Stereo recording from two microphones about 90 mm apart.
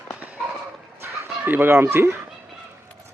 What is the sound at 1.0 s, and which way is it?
Chicken, 25° right (ahead or behind).